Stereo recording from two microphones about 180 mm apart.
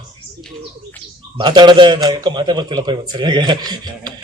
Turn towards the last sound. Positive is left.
turn(degrees=-25)  # may be behind; listen again after turning